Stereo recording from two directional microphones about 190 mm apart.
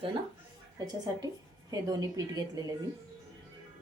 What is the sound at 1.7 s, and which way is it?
A woman's voice, 20° right (ahead or behind).